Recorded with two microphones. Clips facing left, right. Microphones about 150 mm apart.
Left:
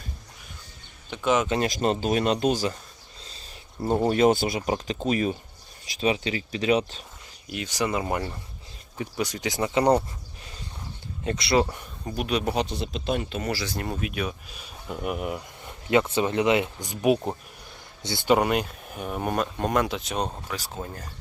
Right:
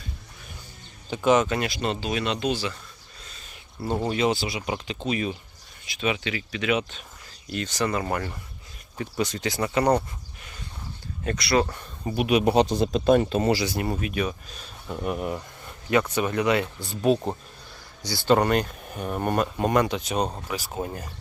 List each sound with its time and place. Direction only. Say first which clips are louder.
1.1 s speech: right 3 dB; centre (ahead or behind)
1.6 s speech: left 4 dB; 40° left (ahead or behind)
3.2 s a sound: left 1 dB; 30° left (ahead or behind)
4.1 s speech: left 5 dB; 50° left (ahead or behind)
7.5 s speech: right 1 dB; 10° left (ahead or behind)
11.2 s speech: even; 25° left (ahead or behind)
11.6 s speech: left 1 dB; 10° left (ahead or behind)
12.0 s speech: right 5 dB; 5° right (ahead or behind)
12.6 s speech: right 8 dB; 45° right (ahead or behind)
13.4 s speech: right 6 dB; 20° right (ahead or behind); by 15.4 s 5° left (ahead or behind)
15.6 s speech: left 1 dB; 20° left (ahead or behind)
18.3 s speech: right 1 dB; 5° left (ahead or behind)
20.3 s speech: right 3 dB; 10° right (ahead or behind)